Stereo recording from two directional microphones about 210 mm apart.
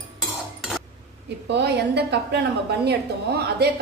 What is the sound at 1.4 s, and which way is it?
A woman's voice, 55° right (ahead or behind).